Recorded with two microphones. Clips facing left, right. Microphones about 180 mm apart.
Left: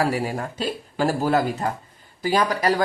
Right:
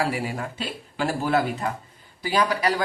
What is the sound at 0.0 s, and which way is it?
Speech, 40° left (ahead or behind).